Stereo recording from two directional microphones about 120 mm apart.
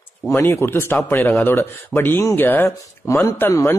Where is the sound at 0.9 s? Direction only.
5° left (ahead or behind).